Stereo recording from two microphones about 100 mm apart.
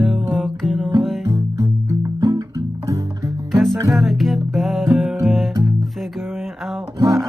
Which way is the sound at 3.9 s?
Centre (ahead or behind).